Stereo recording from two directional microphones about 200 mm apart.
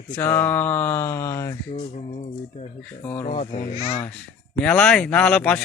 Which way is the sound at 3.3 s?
35° left (ahead or behind).